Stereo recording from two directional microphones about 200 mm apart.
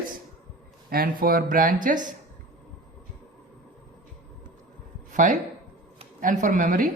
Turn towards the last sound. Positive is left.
turn(degrees=-40)  # may be behind; listen again after turning